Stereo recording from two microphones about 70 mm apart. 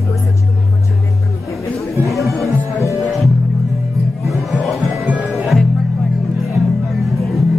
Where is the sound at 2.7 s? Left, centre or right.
Left.